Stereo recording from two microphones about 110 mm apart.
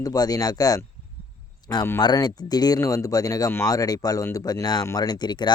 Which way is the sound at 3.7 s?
35° left (ahead or behind).